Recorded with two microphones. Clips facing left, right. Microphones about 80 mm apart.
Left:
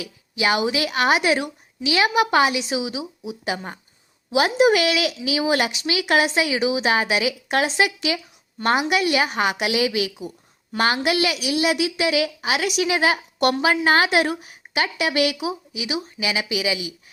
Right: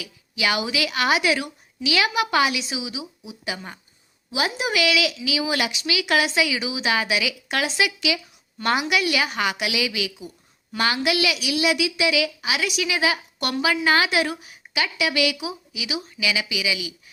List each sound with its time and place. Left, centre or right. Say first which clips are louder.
0.0 s a woman's voice: left 3 dB; left
2.6 s a woman's voice: left 5 dB; left
4.3 s a woman's voice: left 8 dB; left